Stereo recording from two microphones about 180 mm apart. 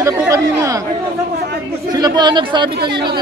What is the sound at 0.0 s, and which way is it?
Speech, 15° right (ahead or behind).